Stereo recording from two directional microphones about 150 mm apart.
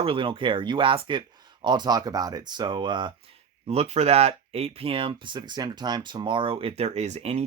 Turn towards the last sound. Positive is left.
turn(degrees=-45)  # may be behind; listen again after turning